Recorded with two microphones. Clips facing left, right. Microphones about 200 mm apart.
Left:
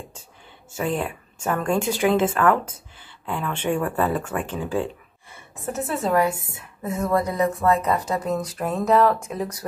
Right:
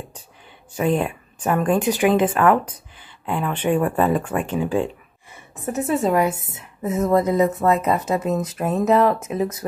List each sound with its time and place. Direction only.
0.7 s a woman's voice: 25° right (ahead or behind)
3.7 s speech: 20° right (ahead or behind)